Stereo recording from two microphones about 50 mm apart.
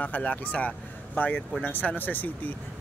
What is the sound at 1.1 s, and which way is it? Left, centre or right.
Speech, left.